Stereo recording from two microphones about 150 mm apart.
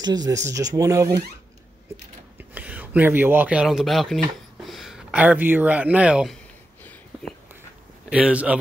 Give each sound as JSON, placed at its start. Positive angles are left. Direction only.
{"t": 0.0, "sound": "speech", "side_deg": -25}
{"t": 2.3, "sound": "speech", "side_deg": -10}
{"t": 6.8, "sound": "whispering", "side_deg": 10}
{"t": 8.1, "sound": "speech", "side_deg": -10}